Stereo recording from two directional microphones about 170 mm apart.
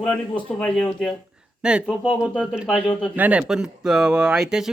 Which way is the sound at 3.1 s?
10° right (ahead or behind).